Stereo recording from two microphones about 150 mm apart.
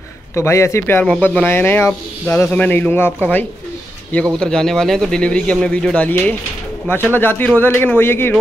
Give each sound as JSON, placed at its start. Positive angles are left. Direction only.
{"t": 0.3, "sound": "a man's voice", "side_deg": 20}